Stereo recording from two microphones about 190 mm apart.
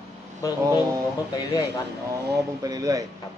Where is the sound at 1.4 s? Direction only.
20° left (ahead or behind).